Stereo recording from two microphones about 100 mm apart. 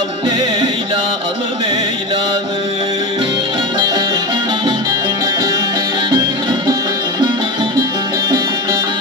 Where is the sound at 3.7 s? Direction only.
55° right (ahead or behind).